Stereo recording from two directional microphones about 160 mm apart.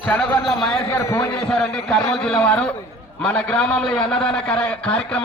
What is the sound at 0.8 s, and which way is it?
Speech, 15° left (ahead or behind).